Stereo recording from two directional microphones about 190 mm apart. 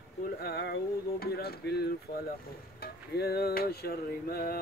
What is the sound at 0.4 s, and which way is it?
Speech, 55° left (ahead or behind).